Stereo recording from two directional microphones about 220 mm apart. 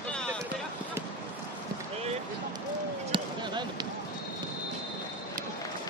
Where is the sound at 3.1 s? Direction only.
20° right (ahead or behind).